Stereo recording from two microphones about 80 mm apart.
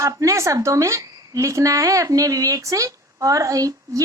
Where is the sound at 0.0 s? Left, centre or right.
Right.